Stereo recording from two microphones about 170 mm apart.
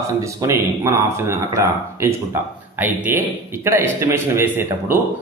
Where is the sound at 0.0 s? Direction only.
15° right (ahead or behind).